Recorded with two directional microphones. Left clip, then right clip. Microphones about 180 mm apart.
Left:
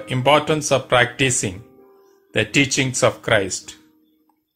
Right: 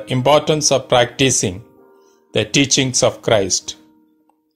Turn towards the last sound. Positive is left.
turn(degrees=-50)  # may be behind; listen again after turning